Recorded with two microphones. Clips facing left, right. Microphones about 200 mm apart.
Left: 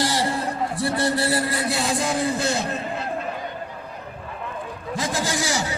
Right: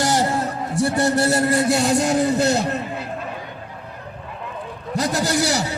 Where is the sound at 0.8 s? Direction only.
45° right (ahead or behind).